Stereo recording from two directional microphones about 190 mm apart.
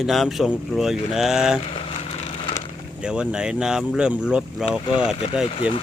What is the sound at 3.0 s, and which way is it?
Speech, 5° right (ahead or behind).